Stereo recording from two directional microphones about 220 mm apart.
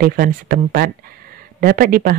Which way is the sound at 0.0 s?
40° right (ahead or behind).